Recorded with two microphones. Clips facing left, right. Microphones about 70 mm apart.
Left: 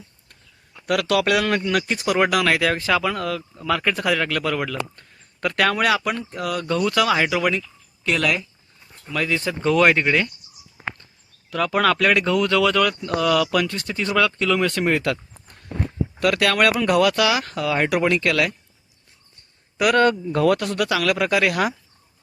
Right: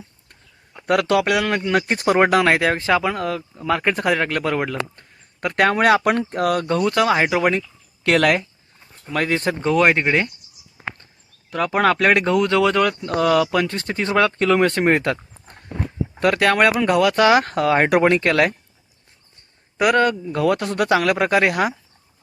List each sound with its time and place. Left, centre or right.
0.3 s a sound: right
1.2 s speech: centre
1.9 s speech: right
2.1 s a man's voice: right
6.0 s speech: right
8.0 s speech: right
9.6 s a man's voice: right
11.5 s a man's voice: right
17.2 s speech: right
19.7 s speech: right
20.0 s speech: centre
20.6 s a man's voice: right